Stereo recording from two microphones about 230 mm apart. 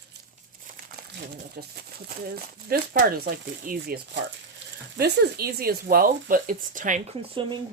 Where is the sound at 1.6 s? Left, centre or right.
Right.